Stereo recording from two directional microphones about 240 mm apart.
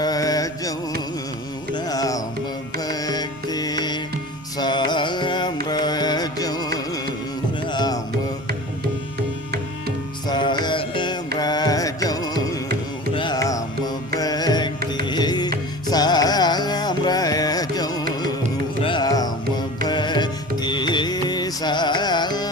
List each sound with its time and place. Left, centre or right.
0.0 s music: centre
1.7 s carnatic music: centre
2.7 s music: centre
5.6 s carnatic music: centre
7.7 s music: centre
10.2 s mantra: centre
11.3 s music: centre
20.6 s carnatic music: centre